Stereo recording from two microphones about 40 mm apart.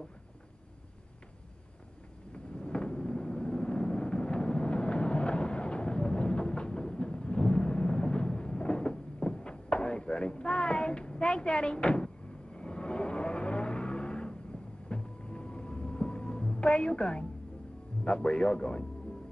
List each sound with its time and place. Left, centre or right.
2.3 s a sound: left
12.5 s vehicle: left
14.9 s music: left
18.0 s speech: left